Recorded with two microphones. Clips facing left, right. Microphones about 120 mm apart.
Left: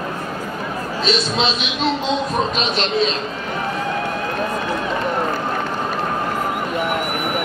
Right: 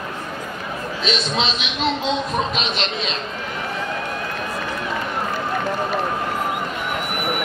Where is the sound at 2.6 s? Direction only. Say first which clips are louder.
Left 6 dB; 40° left (ahead or behind).